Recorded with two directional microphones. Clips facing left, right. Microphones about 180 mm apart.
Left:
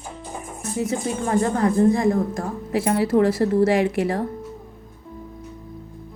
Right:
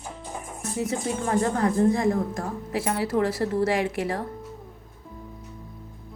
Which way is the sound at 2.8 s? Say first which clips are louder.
Left 6 dB; 20° left (ahead or behind).